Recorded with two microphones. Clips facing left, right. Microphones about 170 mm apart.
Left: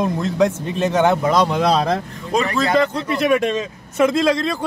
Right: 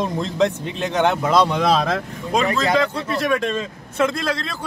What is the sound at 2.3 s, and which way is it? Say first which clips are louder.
Speech: left 1 dB; 5° right (ahead or behind).